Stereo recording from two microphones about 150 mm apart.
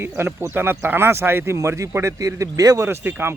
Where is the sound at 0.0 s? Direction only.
15° right (ahead or behind).